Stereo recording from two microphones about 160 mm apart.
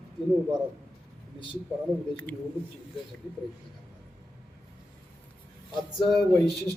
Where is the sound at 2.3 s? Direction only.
5° left (ahead or behind).